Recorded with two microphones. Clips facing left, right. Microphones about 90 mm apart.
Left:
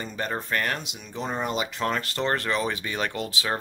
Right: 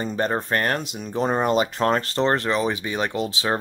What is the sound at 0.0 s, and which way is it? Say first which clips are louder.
Speech: right 7 dB; 35° right (ahead or behind).